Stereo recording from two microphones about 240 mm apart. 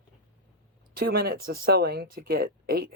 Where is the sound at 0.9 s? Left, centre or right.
Right.